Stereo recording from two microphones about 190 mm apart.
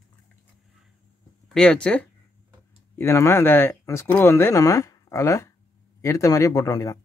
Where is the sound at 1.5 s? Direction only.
5° left (ahead or behind).